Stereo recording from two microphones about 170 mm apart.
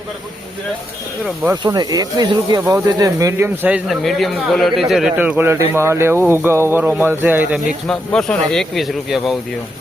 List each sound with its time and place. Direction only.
1.2 s speech: 5° right (ahead or behind)
1.6 s speech: 25° right (ahead or behind)
7.9 s speech: 5° left (ahead or behind)